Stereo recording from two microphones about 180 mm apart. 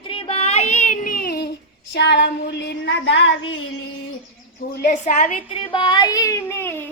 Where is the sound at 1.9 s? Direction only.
75° left (ahead or behind).